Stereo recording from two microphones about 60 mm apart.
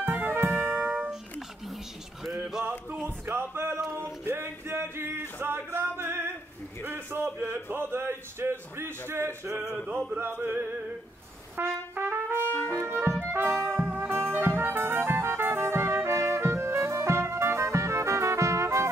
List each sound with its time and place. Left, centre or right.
0.0 s music: right
2.9 s a sound: right
4.2 s male singing: right
6.9 s a sound: right
7.7 s speech: right
10.1 s music: right
11.5 s trumpet: right
12.6 s clarinet: right
13.3 s music: right